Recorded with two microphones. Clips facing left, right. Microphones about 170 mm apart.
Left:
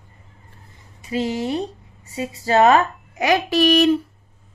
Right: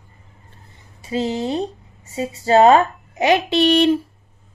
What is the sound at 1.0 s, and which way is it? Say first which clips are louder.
Speech: right 1 dB; 30° right (ahead or behind).